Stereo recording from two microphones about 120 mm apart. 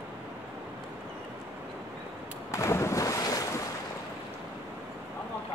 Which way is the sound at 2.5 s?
25° left (ahead or behind).